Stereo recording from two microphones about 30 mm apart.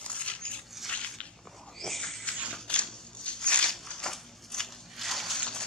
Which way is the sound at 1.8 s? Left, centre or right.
Centre.